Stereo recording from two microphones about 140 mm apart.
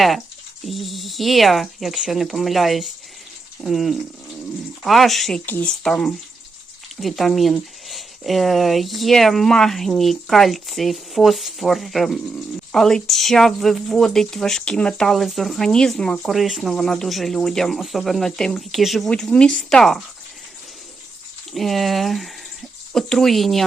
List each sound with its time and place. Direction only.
0.6 s speech: centre (ahead or behind)
21.5 s speech: centre (ahead or behind)